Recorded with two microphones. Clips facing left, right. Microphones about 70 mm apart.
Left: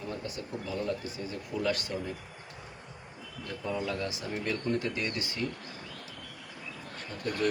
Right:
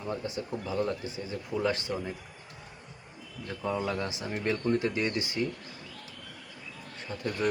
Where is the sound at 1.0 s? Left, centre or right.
Right.